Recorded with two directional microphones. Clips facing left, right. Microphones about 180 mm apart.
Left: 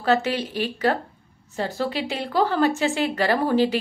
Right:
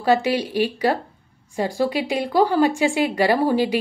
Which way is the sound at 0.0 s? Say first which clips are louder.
Right 3 dB; 10° right (ahead or behind).